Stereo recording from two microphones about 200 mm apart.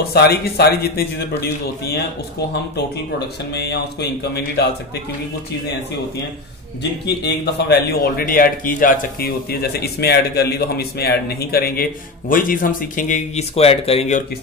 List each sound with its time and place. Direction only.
0.0 s speech: 55° left (ahead or behind)
3.5 s speech: 55° left (ahead or behind)
6.8 s speech: 55° left (ahead or behind); by 14.2 s 30° left (ahead or behind)